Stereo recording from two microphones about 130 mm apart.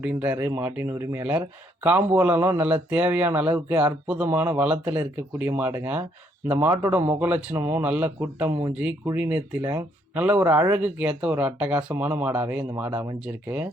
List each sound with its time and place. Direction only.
0.0 s speech: 10° right (ahead or behind)
7.9 s speech: 10° right (ahead or behind)